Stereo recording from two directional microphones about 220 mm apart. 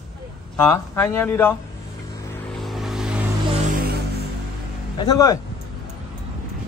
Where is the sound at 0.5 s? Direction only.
10° left (ahead or behind).